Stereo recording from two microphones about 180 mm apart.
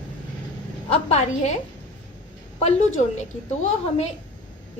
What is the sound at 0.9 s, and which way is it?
Speech, 35° left (ahead or behind).